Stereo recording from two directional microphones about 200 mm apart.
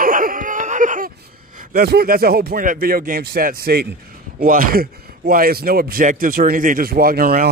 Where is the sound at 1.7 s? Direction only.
50° right (ahead or behind).